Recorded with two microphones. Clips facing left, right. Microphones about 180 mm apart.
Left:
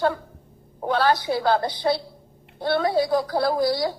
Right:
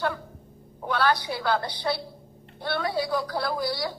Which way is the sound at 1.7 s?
50° left (ahead or behind).